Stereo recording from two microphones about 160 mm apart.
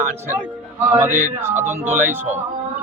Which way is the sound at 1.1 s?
50° right (ahead or behind).